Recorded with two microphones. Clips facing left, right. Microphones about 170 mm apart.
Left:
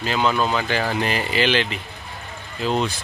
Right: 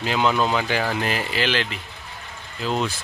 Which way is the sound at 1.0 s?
Centre (ahead or behind).